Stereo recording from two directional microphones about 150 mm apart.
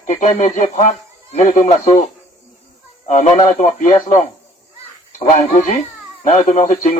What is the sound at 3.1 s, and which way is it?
Speech, 55° left (ahead or behind).